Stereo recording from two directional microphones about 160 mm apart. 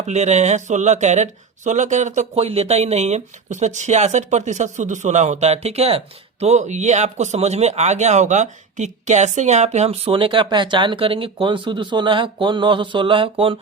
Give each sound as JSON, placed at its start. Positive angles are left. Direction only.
{"t": 0.0, "sound": "speech", "side_deg": -45}